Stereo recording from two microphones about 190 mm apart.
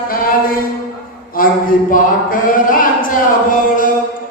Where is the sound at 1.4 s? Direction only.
50° left (ahead or behind).